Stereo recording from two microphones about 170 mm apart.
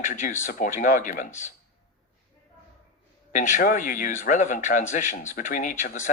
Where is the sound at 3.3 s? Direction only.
50° left (ahead or behind).